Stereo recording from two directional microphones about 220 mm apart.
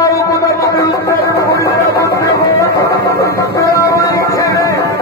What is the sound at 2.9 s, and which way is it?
Music, 45° right (ahead or behind).